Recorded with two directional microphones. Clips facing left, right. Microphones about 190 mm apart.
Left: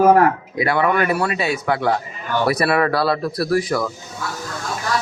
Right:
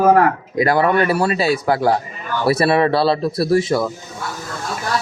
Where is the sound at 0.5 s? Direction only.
40° right (ahead or behind); by 3.9 s 25° right (ahead or behind).